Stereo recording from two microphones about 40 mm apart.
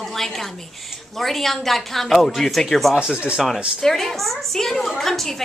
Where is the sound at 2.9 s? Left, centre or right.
Right.